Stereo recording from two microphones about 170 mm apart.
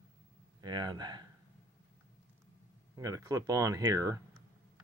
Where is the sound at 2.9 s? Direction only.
20° right (ahead or behind).